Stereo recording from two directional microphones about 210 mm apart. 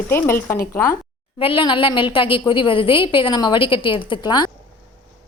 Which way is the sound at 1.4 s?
25° left (ahead or behind).